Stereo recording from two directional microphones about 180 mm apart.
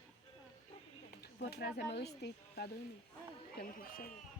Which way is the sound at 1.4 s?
60° left (ahead or behind).